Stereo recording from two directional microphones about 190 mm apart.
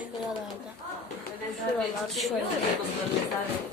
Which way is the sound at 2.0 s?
Centre (ahead or behind).